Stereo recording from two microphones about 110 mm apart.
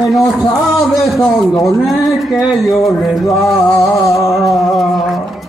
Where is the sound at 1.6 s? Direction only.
Centre (ahead or behind).